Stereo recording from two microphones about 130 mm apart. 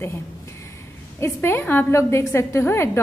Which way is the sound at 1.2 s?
20° left (ahead or behind).